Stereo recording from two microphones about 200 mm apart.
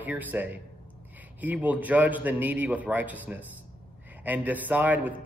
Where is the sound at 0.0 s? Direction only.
10° right (ahead or behind).